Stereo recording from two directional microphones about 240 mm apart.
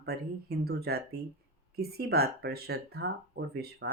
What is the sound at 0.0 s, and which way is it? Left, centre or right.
Speech, right.